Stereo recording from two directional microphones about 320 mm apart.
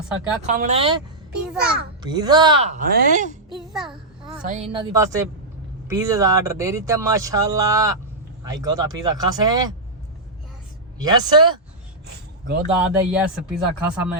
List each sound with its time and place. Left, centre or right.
0.4 s speech: right
3.5 s a child's voice: centre
4.4 s speech: right
10.9 s speech: centre
12.5 s speech: right
12.8 s speech: centre